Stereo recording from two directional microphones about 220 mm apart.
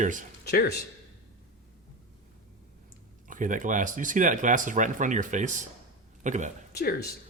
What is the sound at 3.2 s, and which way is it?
A man's voice, 35° right (ahead or behind).